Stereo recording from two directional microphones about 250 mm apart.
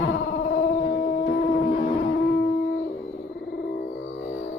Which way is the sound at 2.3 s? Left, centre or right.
Left.